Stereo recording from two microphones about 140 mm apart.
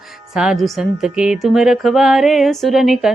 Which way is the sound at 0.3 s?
5° right (ahead or behind).